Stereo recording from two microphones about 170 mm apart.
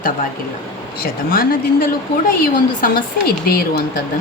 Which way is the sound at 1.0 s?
60° left (ahead or behind).